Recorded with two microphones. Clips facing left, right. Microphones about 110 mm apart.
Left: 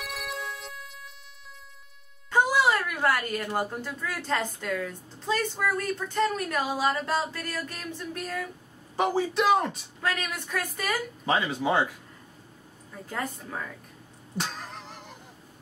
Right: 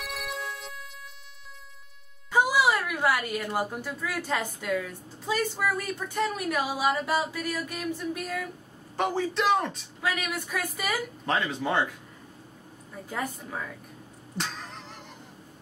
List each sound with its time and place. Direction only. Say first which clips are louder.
0.0 s music: even; centre (ahead or behind)
2.3 s a woman's voice: even; 10° right (ahead or behind)
8.9 s a man's voice: left 2 dB; 5° left (ahead or behind)
10.0 s a woman's voice: even; 10° right (ahead or behind)
11.2 s a man's voice: left 3 dB; 5° left (ahead or behind)
12.9 s a man's voice: even; 5° right (ahead or behind)
14.3 s vehicle: left 1 dB; 5° left (ahead or behind)